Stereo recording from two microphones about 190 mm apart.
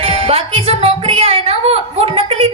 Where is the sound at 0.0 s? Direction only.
30° right (ahead or behind).